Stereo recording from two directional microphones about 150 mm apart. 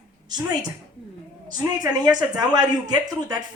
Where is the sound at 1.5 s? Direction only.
30° right (ahead or behind).